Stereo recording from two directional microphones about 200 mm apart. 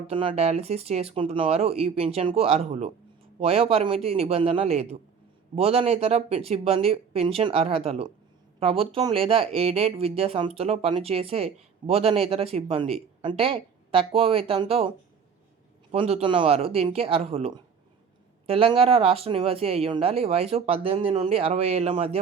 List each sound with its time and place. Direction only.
0.1 s speech: 25° right (ahead or behind)